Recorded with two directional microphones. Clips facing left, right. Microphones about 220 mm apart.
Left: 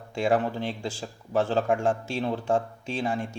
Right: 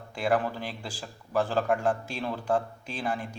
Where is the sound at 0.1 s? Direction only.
25° left (ahead or behind).